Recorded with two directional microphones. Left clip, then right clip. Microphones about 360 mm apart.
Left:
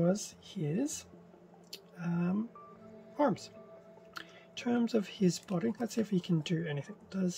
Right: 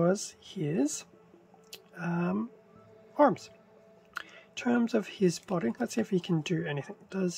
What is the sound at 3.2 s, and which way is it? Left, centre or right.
Speech, centre.